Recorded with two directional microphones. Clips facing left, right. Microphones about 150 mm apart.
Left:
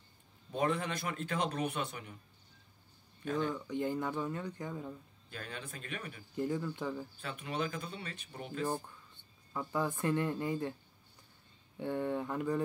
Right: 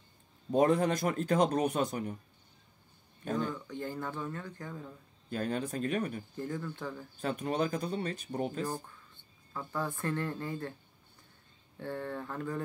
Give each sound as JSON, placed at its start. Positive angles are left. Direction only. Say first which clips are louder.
{"t": 0.5, "sound": "a man's voice", "louder": "right 8 dB", "side_deg": -40}
{"t": 3.5, "sound": "speech", "louder": "left 3 dB", "side_deg": 15}
{"t": 5.3, "sound": "a man's voice", "louder": "right 11 dB", "side_deg": -40}
{"t": 6.3, "sound": "speech", "louder": "left 2 dB", "side_deg": 15}
{"t": 7.2, "sound": "a man's voice", "louder": "right 6 dB", "side_deg": -45}
{"t": 8.6, "sound": "speech", "louder": "left 1 dB", "side_deg": 15}
{"t": 11.7, "sound": "speech", "louder": "left 3 dB", "side_deg": 15}